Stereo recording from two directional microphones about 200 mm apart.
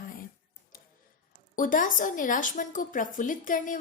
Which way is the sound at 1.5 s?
40° left (ahead or behind).